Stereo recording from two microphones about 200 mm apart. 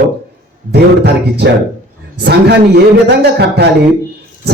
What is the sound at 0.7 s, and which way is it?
Music, 55° right (ahead or behind).